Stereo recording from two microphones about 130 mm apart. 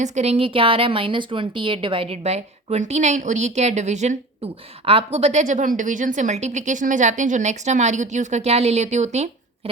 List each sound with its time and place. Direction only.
0.0 s a woman's voice: 60° right (ahead or behind)
4.9 s a woman's voice: 50° right (ahead or behind)